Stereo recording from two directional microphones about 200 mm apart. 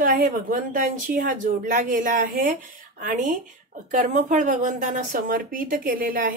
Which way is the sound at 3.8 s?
40° right (ahead or behind).